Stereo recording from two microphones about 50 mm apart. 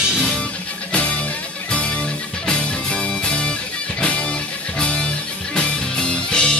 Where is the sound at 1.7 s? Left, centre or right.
Left.